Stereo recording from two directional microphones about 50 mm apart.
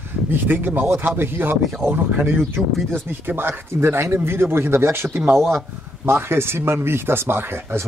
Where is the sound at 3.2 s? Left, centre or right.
Right.